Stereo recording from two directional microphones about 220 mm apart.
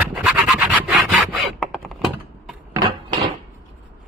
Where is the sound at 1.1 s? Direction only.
Centre (ahead or behind).